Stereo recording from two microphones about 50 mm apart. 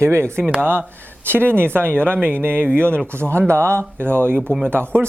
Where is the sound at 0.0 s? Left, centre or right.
Right.